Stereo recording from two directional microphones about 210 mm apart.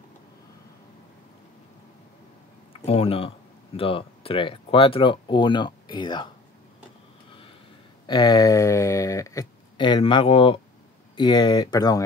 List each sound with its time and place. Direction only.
2.8 s speech: 30° left (ahead or behind)
8.1 s speech: 20° left (ahead or behind)